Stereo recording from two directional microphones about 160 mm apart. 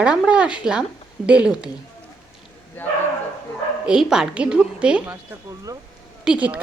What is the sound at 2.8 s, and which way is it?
Speech, 10° left (ahead or behind).